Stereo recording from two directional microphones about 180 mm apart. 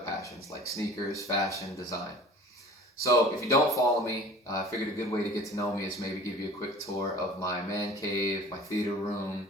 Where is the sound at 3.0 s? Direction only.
15° left (ahead or behind).